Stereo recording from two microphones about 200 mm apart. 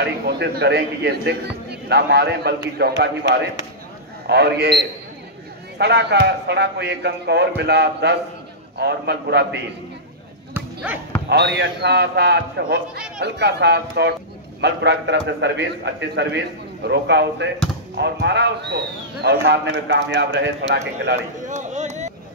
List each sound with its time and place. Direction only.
0.0 s a man's voice: 60° right (ahead or behind)
4.3 s a man's voice: 55° right (ahead or behind)
10.5 s basketball bounce: 5° right (ahead or behind)
11.2 s a man's voice: 55° right (ahead or behind)
21.4 s a sound: 40° right (ahead or behind)